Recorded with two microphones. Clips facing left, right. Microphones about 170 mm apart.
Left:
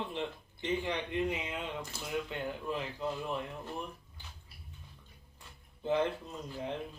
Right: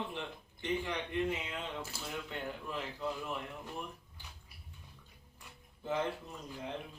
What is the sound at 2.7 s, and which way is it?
Speech, 20° left (ahead or behind).